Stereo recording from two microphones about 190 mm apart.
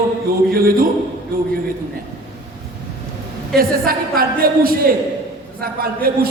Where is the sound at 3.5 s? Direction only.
50° right (ahead or behind).